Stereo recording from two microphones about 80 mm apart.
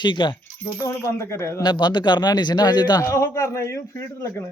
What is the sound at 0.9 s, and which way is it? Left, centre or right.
Speech, left.